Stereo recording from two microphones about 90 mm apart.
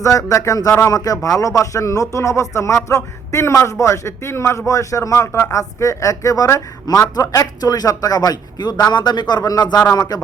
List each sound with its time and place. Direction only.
0.0 s a man's voice: 35° left (ahead or behind)